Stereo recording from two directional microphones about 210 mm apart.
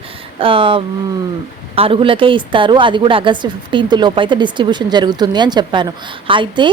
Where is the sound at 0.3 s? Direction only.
25° right (ahead or behind).